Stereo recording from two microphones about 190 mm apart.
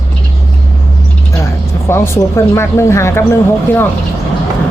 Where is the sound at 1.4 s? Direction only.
15° left (ahead or behind).